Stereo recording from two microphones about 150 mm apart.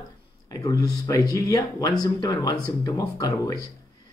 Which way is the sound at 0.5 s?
25° left (ahead or behind).